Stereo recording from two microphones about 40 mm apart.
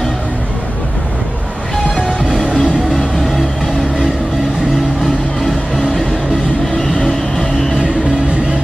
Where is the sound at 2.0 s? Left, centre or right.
Centre.